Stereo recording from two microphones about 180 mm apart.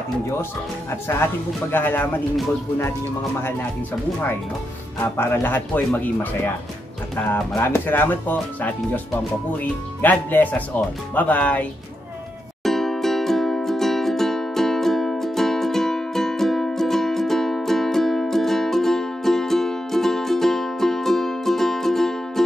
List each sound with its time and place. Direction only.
1.0 s speech: 10° left (ahead or behind)
5.0 s speech: 10° left (ahead or behind)
12.6 s music: centre (ahead or behind)